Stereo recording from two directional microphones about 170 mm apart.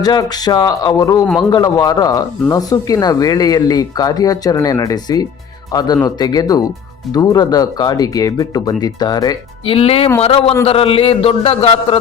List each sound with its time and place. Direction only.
0.0 s a man's voice: 25° left (ahead or behind)